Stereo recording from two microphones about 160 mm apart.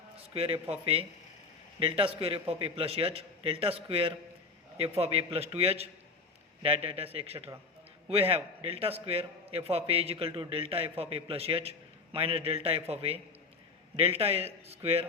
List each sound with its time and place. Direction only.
0.2 s a man's voice: 35° right (ahead or behind)